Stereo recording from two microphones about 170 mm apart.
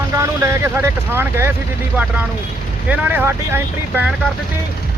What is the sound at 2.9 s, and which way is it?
Speech, 10° right (ahead or behind).